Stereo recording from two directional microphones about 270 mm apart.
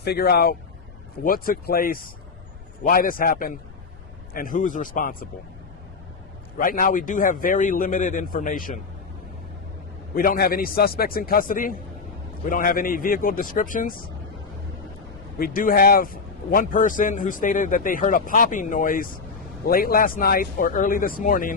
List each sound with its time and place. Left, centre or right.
0.0 s speech: left
6.6 s a man's voice: left
10.2 s speech: left
15.4 s a man's voice: left